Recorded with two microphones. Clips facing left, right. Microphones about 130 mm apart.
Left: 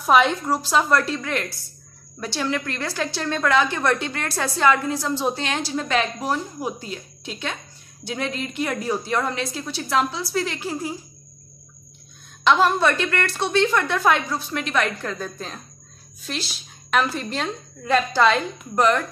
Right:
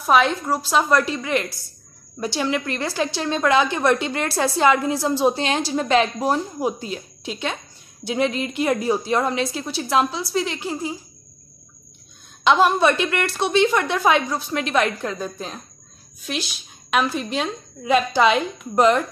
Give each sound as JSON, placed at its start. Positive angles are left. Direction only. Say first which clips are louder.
{"t": 0.0, "sound": "a woman's voice", "louder": "even", "side_deg": 0}
{"t": 12.4, "sound": "a woman's voice", "louder": "right 2 dB", "side_deg": -10}
{"t": 15.0, "sound": "a woman's voice", "louder": "right 2 dB", "side_deg": -15}